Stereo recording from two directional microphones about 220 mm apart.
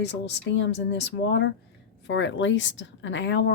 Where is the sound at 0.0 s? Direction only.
50° left (ahead or behind).